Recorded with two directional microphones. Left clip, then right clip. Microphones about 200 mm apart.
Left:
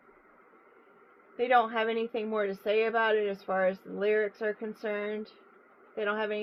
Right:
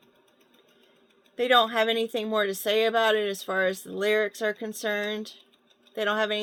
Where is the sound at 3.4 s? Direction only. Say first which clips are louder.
Right 2 dB; 60° right (ahead or behind).